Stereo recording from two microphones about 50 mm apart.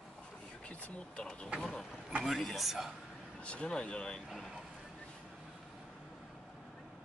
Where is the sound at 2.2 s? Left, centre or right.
Centre.